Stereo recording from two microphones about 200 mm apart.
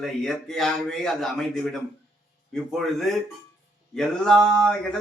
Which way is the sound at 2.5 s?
Centre (ahead or behind).